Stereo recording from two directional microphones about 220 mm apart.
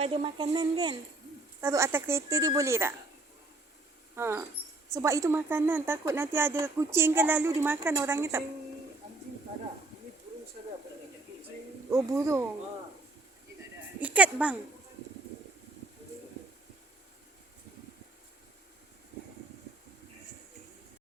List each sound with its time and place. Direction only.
0.0 s a woman's voice: 25° right (ahead or behind)
4.1 s speech: 10° right (ahead or behind)
11.9 s speech: 10° right (ahead or behind)
14.0 s speech: 5° right (ahead or behind)